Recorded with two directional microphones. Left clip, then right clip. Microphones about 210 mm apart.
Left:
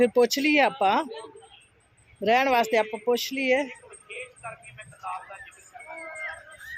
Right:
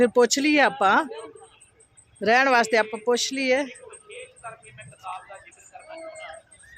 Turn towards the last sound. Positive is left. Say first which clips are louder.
# left 2 dB
turn(degrees=25)  # may be behind; listen again after turning